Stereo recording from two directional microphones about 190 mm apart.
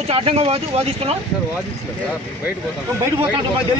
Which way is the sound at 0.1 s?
30° right (ahead or behind).